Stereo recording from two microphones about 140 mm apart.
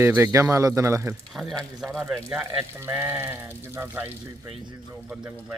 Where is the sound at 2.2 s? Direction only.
10° right (ahead or behind).